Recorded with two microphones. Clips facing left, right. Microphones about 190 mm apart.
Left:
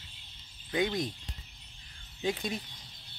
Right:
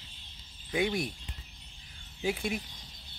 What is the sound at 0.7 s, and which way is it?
Speech, 10° right (ahead or behind).